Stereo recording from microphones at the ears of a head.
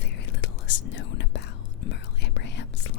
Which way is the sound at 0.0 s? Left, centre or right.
Left.